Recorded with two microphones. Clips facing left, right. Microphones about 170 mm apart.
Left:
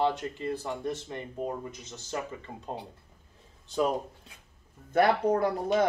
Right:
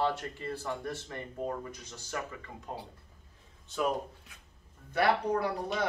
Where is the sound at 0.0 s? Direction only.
15° left (ahead or behind); by 3.9 s 35° left (ahead or behind).